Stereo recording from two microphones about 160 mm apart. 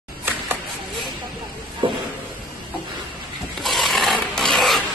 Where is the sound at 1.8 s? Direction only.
30° right (ahead or behind).